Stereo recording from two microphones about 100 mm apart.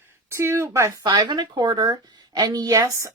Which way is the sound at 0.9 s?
45° right (ahead or behind).